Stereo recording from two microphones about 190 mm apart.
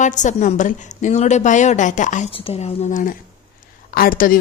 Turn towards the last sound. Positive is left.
turn(degrees=50)  # may be behind; listen again after turning